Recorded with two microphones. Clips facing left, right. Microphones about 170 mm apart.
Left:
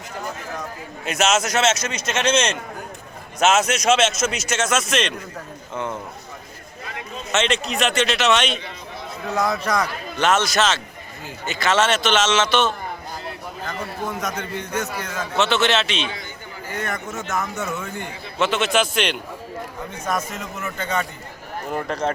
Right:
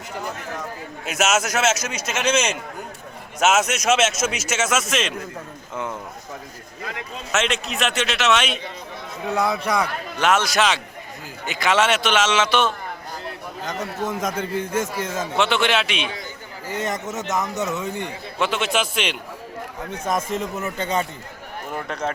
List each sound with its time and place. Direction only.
1.0 s a man's voice: 5° right (ahead or behind)
7.3 s a man's voice: centre (ahead or behind)
14.1 s speech: 25° right (ahead or behind)
15.4 s a man's voice: 10° right (ahead or behind)
20.1 s speech: 30° right (ahead or behind)
21.7 s a man's voice: centre (ahead or behind)